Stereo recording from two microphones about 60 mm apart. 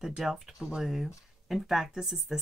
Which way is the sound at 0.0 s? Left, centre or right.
Centre.